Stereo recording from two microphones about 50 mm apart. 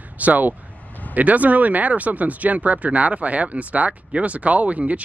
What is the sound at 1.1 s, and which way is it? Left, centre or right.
Speech, right.